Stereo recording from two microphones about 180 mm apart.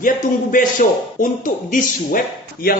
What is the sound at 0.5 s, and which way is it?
Speech, 50° left (ahead or behind).